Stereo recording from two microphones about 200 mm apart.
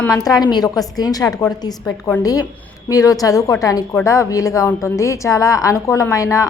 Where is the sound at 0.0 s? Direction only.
15° left (ahead or behind).